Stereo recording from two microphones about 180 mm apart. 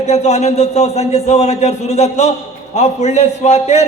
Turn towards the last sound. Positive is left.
turn(degrees=40)  # may be behind; listen again after turning